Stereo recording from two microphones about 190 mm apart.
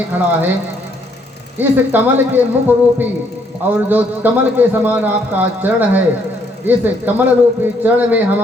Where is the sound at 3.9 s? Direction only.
10° right (ahead or behind).